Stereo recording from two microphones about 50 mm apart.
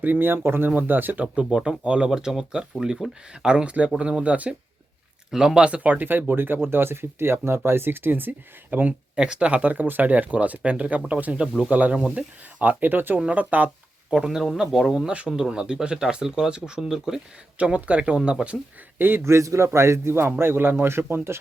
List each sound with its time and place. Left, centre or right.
0.0 s speech: right
1.5 s speech: centre
5.3 s speech: centre
5.5 s speech: right
8.9 s speech: centre; by 13.7 s right
14.1 s speech: centre
17.6 s speech: right
18.9 s speech: right
19.2 s a man's voice: right